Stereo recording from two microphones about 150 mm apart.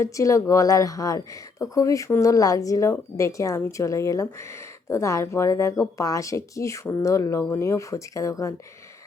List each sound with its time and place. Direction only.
0.0 s speech: 20° left (ahead or behind)